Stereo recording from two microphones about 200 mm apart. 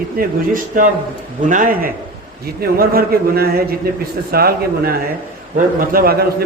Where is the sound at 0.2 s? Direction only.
45° right (ahead or behind).